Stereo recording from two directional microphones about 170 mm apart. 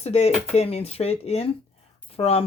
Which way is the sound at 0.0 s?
40° left (ahead or behind).